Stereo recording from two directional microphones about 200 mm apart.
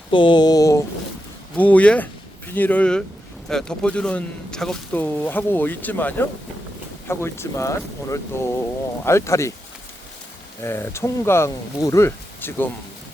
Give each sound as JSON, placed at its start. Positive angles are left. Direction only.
{"t": 0.1, "sound": "a man's voice", "side_deg": 25}
{"t": 10.6, "sound": "a man's voice", "side_deg": 10}